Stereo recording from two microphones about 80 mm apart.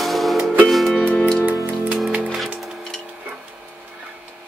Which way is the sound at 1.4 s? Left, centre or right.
Right.